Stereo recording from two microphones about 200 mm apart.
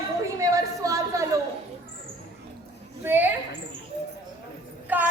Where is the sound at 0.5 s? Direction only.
15° right (ahead or behind).